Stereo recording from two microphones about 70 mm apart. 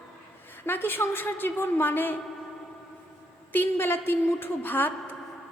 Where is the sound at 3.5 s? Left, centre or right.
Left.